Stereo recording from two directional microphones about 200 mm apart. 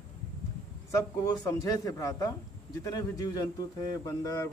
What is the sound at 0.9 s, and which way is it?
Speech, 20° left (ahead or behind).